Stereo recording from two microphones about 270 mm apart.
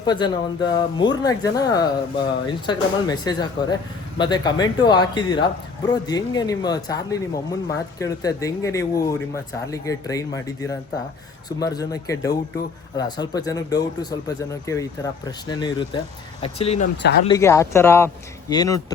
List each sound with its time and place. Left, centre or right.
0.0 s speech: centre
17.0 s speech: left
17.2 s speech: centre